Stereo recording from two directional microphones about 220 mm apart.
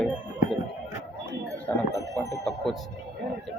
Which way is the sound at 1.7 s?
10° left (ahead or behind).